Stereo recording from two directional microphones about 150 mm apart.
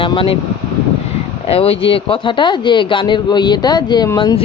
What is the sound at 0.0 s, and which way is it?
Speech, 35° left (ahead or behind).